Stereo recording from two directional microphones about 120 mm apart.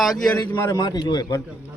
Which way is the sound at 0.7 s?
35° left (ahead or behind).